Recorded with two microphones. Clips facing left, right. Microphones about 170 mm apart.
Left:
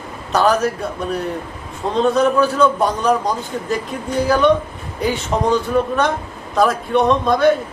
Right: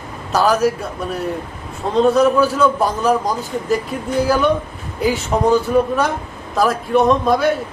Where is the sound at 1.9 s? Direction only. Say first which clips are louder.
Right 2 dB; 5° right (ahead or behind).